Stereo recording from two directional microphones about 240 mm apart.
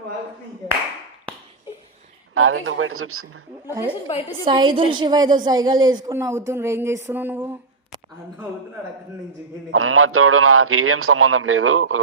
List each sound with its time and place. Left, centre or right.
2.3 s a man's voice: right
3.7 s a woman's voice: centre
9.7 s a man's voice: right